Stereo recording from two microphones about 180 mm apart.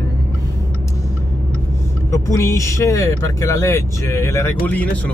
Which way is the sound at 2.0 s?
15° left (ahead or behind).